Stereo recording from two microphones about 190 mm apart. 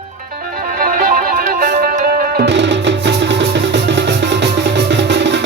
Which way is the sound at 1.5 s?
45° right (ahead or behind).